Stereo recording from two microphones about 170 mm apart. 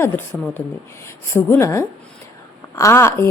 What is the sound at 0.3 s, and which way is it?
A woman's voice, 10° left (ahead or behind).